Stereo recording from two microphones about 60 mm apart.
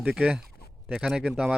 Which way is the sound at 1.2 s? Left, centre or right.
Centre.